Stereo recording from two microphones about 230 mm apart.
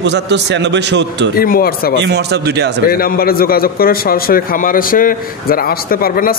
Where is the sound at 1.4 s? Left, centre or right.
Left.